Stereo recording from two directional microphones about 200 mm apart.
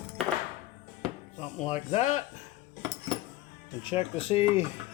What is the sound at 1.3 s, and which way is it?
Speech, 35° left (ahead or behind).